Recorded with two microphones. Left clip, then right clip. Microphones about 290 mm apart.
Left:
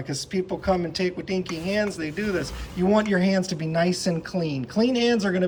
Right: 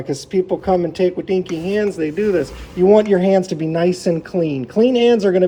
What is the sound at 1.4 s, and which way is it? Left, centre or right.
Speech, centre.